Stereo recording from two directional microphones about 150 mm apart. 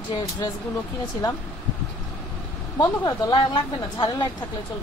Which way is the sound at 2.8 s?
25° left (ahead or behind).